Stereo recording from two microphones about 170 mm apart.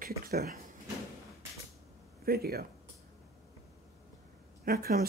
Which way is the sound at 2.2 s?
65° right (ahead or behind).